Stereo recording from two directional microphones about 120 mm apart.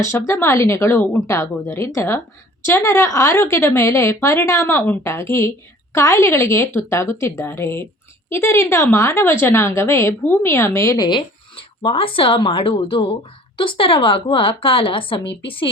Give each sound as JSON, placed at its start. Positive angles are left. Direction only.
{"t": 0.0, "sound": "a woman's voice", "side_deg": 25}
{"t": 11.5, "sound": "a woman's voice", "side_deg": 45}